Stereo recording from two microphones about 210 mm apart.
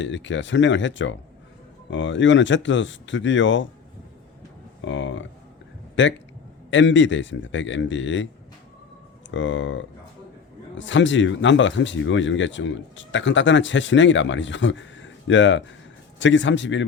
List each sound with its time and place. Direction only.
0.0 s speech: 60° left (ahead or behind)
4.8 s speech: 60° left (ahead or behind)
9.3 s speech: 60° left (ahead or behind)